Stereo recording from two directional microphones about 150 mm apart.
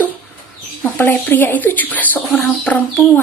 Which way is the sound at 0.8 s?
10° left (ahead or behind).